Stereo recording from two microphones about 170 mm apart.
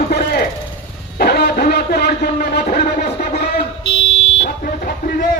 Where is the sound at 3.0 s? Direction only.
40° left (ahead or behind).